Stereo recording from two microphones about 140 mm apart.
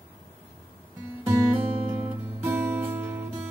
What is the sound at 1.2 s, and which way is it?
Music, 15° right (ahead or behind).